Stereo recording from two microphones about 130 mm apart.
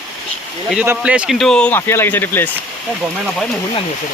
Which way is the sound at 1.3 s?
5° left (ahead or behind).